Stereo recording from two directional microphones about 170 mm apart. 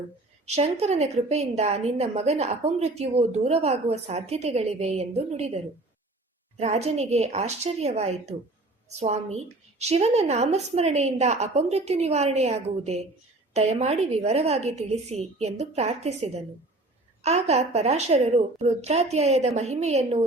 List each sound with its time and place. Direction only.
0.4 s a woman's voice: 40° right (ahead or behind)
6.6 s a woman's voice: 40° right (ahead or behind)